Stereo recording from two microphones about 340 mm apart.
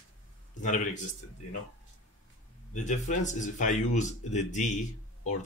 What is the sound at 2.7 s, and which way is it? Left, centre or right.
Speech, left.